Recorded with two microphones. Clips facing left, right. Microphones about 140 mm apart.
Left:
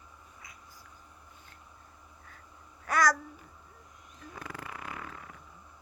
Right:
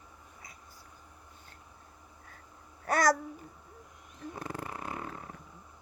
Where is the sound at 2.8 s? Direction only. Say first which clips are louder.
Right 1 dB; 30° right (ahead or behind).